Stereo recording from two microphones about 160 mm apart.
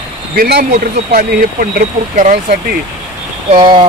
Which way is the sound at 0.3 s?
70° right (ahead or behind).